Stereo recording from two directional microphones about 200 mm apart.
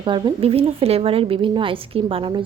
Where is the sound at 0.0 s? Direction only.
25° right (ahead or behind).